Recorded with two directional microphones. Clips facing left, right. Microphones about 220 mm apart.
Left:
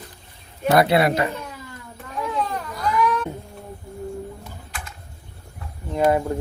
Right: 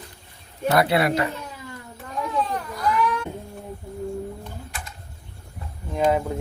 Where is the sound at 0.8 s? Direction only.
20° left (ahead or behind).